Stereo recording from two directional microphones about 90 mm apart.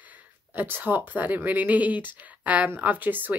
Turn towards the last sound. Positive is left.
turn(degrees=-20)  # may be behind; listen again after turning